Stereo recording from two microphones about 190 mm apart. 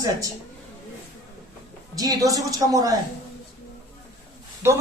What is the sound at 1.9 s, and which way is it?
A woman's voice, 20° right (ahead or behind).